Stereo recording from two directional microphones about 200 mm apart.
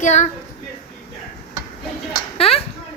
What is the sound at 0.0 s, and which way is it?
Speech, 35° left (ahead or behind).